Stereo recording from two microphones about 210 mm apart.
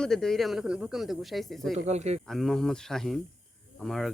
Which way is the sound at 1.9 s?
30° right (ahead or behind).